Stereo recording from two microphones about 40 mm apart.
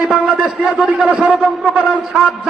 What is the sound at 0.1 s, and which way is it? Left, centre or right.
A man's voice, right.